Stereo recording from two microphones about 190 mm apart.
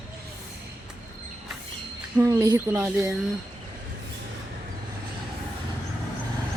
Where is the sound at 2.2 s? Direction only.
20° right (ahead or behind).